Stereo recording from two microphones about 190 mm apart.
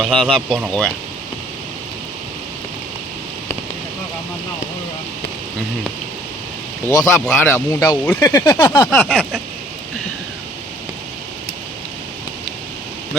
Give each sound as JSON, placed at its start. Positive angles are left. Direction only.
{"t": 0.0, "sound": "speech", "side_deg": 0}
{"t": 6.8, "sound": "speech", "side_deg": 10}